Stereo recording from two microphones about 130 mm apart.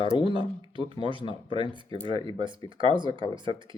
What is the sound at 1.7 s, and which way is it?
Speech, 40° right (ahead or behind).